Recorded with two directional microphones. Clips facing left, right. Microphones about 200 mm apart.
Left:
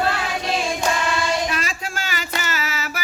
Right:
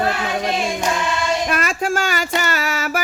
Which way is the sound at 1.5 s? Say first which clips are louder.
Right 6 dB; 55° right (ahead or behind).